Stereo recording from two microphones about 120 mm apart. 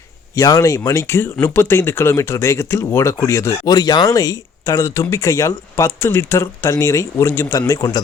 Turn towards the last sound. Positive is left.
turn(degrees=30)  # may be behind; listen again after turning